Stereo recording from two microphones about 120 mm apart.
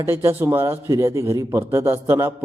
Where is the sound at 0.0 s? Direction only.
20° right (ahead or behind).